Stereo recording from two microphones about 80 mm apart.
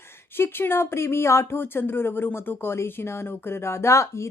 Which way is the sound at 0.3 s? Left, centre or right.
Left.